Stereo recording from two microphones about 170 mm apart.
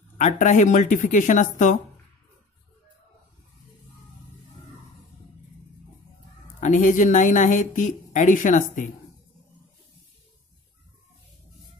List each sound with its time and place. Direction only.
0.2 s a woman's voice: 45° left (ahead or behind)
6.6 s a woman's voice: 50° left (ahead or behind)